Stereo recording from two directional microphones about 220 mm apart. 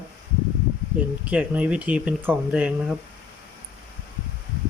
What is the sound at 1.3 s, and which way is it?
Speech, 5° right (ahead or behind).